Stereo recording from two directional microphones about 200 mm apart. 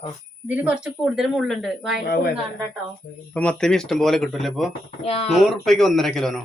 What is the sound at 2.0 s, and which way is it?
Speech, 50° left (ahead or behind).